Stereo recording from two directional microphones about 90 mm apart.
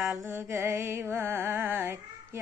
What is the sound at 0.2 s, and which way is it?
Music, 30° right (ahead or behind).